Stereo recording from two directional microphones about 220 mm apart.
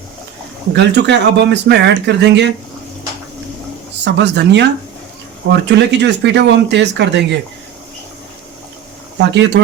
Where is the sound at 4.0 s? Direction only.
50° right (ahead or behind).